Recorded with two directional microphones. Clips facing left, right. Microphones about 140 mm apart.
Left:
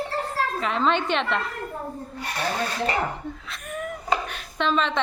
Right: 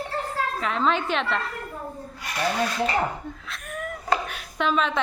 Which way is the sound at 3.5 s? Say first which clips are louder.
Left 1 dB; centre (ahead or behind).